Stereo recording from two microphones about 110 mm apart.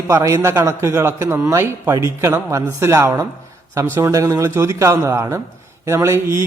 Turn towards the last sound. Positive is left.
turn(degrees=-25)  # may be behind; listen again after turning